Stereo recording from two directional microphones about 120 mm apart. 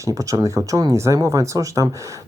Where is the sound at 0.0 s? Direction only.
25° right (ahead or behind).